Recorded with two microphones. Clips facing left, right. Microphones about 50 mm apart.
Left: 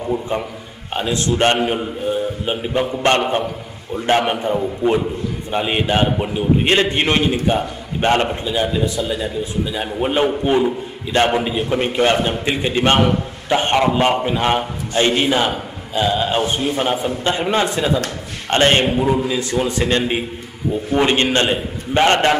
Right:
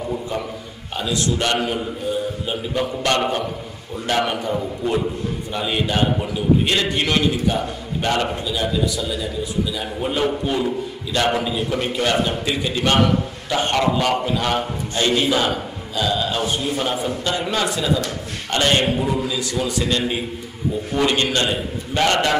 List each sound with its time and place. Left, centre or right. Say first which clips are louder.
0.9 s a man's voice: left 3 dB; left
3.9 s a man's voice: left 4 dB; left